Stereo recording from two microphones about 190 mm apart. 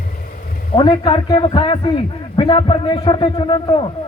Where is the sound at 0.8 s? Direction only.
25° left (ahead or behind).